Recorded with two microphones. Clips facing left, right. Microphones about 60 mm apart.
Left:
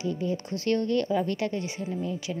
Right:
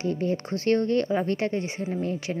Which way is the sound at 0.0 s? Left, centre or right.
Right.